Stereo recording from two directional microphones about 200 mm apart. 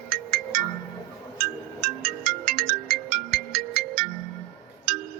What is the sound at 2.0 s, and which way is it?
Music, 45° right (ahead or behind).